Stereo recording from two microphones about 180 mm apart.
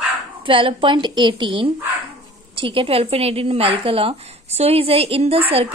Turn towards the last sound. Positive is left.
turn(degrees=-30)  # may be behind; listen again after turning